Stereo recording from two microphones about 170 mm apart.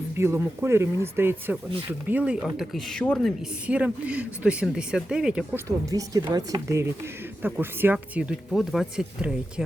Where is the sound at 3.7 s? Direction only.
10° right (ahead or behind).